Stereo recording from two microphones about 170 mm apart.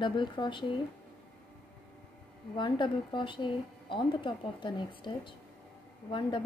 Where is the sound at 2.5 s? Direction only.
30° left (ahead or behind).